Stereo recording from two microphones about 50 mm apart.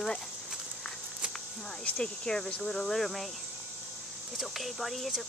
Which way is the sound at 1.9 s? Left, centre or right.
Centre.